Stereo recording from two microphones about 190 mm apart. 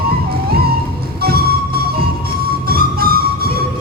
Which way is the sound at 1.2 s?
55° right (ahead or behind).